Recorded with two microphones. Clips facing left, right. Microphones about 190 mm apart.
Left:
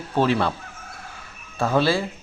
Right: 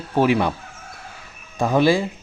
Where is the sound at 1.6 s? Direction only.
15° right (ahead or behind).